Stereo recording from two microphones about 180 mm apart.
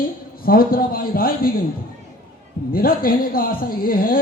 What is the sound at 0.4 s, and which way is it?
A man's voice, 55° left (ahead or behind).